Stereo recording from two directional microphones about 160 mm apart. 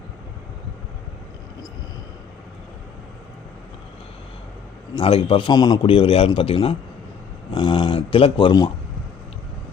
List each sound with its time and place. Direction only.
4.9 s a man's voice: 35° left (ahead or behind)